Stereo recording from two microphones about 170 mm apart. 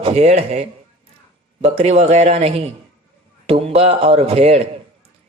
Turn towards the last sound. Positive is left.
turn(degrees=-35)  # may be behind; listen again after turning